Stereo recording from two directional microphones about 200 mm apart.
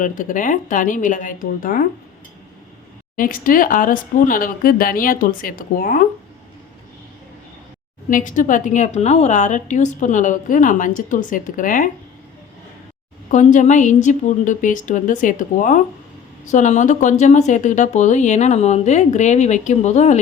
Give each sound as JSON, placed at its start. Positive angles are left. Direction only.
{"t": 0.0, "sound": "a woman's voice", "side_deg": 40}
{"t": 3.2, "sound": "speech", "side_deg": 45}
{"t": 8.1, "sound": "a woman's voice", "side_deg": 40}
{"t": 13.3, "sound": "a woman's voice", "side_deg": 40}